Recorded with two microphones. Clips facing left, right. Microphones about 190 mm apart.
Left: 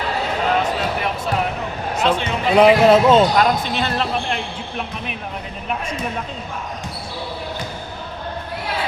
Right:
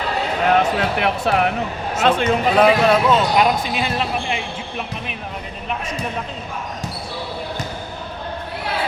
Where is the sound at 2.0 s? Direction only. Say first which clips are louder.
Right 2 dB; 60° right (ahead or behind).